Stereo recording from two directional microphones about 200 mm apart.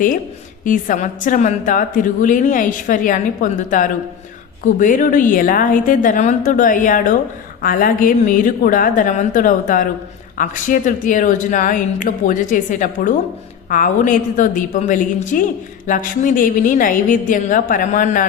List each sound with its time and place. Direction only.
0.6 s a woman's voice: 40° left (ahead or behind)